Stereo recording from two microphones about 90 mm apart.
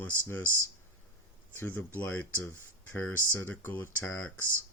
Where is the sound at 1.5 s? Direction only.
25° left (ahead or behind).